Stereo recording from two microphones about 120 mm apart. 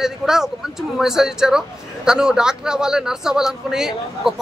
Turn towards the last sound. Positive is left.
turn(degrees=-5)  # may be behind; listen again after turning